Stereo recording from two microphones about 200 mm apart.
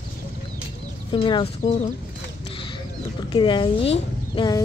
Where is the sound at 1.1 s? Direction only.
25° left (ahead or behind).